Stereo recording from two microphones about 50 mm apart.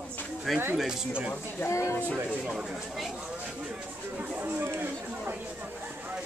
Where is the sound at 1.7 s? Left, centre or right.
Left.